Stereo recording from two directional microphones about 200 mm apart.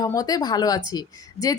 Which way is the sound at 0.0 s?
20° left (ahead or behind).